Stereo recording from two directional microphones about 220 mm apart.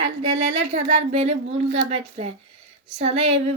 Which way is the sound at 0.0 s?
30° right (ahead or behind).